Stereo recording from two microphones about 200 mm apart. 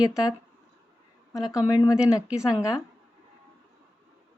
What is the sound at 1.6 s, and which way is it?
Speech, 15° left (ahead or behind).